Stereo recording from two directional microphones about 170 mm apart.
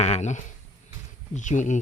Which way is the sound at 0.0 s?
40° left (ahead or behind).